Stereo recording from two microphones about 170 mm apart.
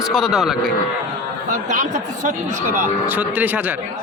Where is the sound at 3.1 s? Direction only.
10° right (ahead or behind).